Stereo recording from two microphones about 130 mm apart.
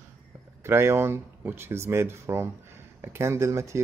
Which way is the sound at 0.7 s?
20° right (ahead or behind).